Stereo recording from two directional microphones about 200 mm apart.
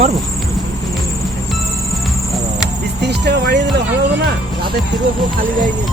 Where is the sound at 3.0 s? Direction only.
55° right (ahead or behind).